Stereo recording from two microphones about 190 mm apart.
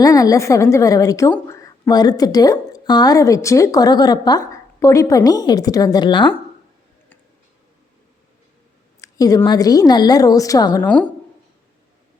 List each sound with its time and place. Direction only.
0.0 s a woman's voice: 20° left (ahead or behind)
9.0 s a woman's voice: 20° left (ahead or behind)
10.8 s a woman's voice: 5° left (ahead or behind)